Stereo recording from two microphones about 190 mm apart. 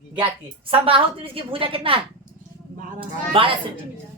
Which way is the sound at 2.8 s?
45° right (ahead or behind).